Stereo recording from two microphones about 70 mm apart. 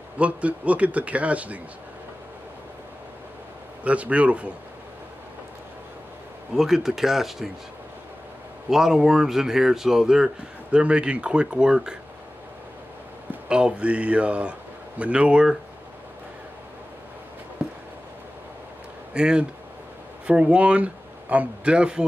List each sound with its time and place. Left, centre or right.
0.2 s speech: centre
3.8 s speech: centre
6.5 s speech: centre
8.6 s speech: centre
13.5 s speech: centre
19.1 s speech: centre